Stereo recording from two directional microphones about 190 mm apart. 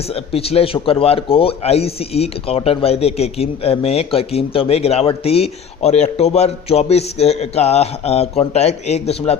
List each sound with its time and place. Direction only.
0.1 s speech: 30° left (ahead or behind)